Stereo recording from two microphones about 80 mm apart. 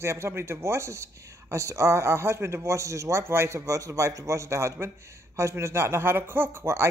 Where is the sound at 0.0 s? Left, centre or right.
Right.